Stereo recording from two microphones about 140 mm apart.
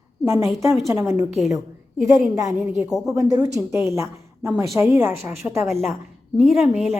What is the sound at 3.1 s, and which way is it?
Speech, 25° right (ahead or behind).